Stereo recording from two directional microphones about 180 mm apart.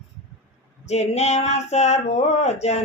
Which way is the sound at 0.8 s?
35° left (ahead or behind).